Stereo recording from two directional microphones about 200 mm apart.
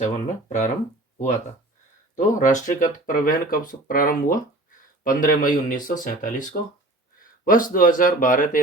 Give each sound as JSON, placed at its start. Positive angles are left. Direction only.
{"t": 0.0, "sound": "speech", "side_deg": 35}
{"t": 2.1, "sound": "speech", "side_deg": 40}